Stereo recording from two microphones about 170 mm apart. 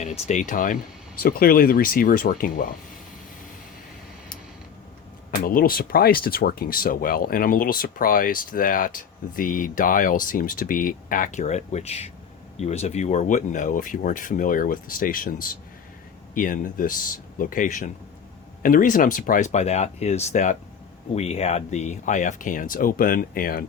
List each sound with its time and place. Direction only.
0.0 s speech: 45° left (ahead or behind)
5.3 s speech: 60° left (ahead or behind)